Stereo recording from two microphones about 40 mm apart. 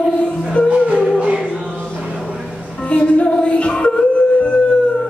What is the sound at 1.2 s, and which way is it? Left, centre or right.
Music, right.